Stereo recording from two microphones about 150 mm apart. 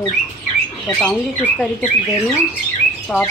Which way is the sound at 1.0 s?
5° left (ahead or behind).